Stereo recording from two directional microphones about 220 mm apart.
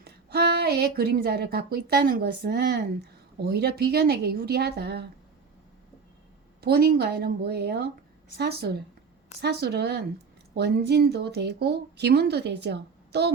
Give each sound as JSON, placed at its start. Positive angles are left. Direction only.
{"t": 0.0, "sound": "a woman's voice", "side_deg": -45}
{"t": 6.6, "sound": "a woman's voice", "side_deg": -45}